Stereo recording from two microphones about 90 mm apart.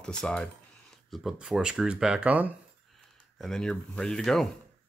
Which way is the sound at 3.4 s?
5° left (ahead or behind).